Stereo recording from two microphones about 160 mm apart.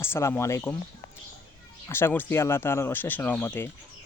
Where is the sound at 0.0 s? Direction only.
15° left (ahead or behind).